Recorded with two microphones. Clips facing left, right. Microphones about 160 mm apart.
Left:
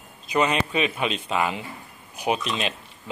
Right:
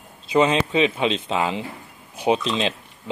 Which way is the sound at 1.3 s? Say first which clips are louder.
Right 2 dB; 25° right (ahead or behind).